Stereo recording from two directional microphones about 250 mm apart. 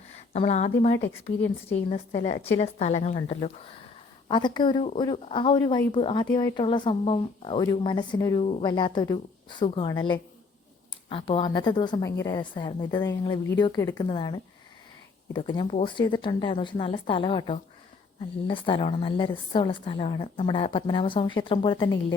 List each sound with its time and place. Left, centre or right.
0.3 s speech: left
0.9 s speech: left
1.7 s a woman's voice: left